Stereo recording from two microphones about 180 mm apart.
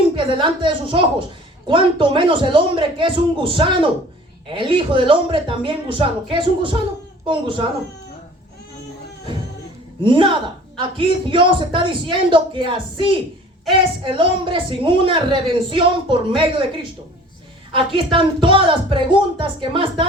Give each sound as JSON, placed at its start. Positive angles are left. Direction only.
{"t": 0.2, "sound": "a woman's voice", "side_deg": -25}
{"t": 10.0, "sound": "a woman's voice", "side_deg": -25}
{"t": 17.7, "sound": "a woman's voice", "side_deg": -30}